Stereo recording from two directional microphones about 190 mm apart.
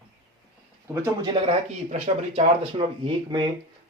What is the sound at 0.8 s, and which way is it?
Speech, 15° right (ahead or behind).